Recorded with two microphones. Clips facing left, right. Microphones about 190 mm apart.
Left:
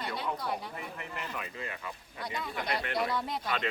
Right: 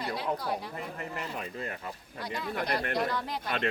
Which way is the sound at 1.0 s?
40° right (ahead or behind).